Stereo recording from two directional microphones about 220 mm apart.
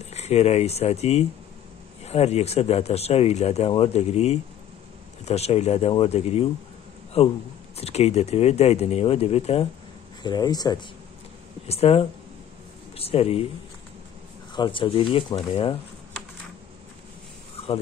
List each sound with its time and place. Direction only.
0.1 s speech: 30° left (ahead or behind)
11.6 s speech: 30° left (ahead or behind)
14.5 s speech: 20° left (ahead or behind)